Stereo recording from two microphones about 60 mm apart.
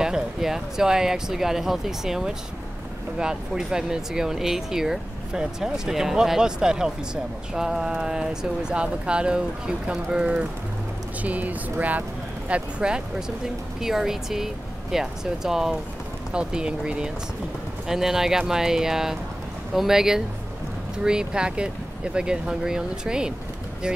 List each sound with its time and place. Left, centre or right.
0.0 s speech: centre
11.2 s speech: right